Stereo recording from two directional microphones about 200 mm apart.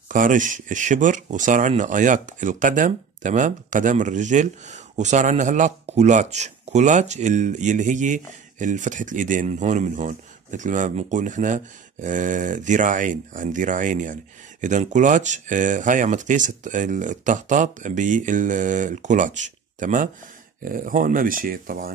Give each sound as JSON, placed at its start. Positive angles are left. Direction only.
{"t": 0.1, "sound": "speech", "side_deg": -40}